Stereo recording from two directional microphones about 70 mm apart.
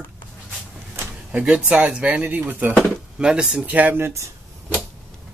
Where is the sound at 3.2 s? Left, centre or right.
Centre.